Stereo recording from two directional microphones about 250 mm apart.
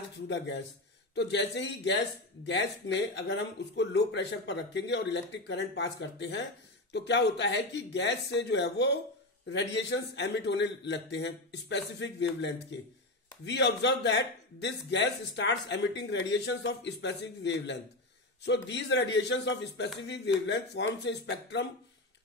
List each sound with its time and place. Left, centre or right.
1.1 s speech: left